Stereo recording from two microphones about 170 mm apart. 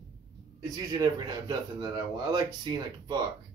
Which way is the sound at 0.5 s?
20° right (ahead or behind).